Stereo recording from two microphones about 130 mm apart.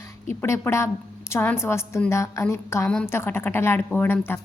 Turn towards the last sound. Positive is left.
turn(degrees=15)  # may be behind; listen again after turning